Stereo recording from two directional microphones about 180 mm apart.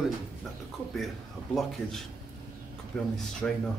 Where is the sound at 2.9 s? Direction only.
5° left (ahead or behind).